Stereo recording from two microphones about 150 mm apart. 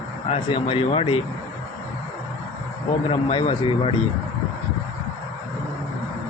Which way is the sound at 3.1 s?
35° left (ahead or behind).